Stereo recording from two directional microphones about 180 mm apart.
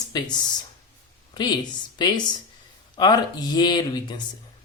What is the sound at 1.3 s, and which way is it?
Speech, 25° left (ahead or behind).